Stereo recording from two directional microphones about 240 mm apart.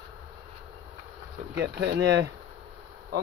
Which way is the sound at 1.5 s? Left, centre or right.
Right.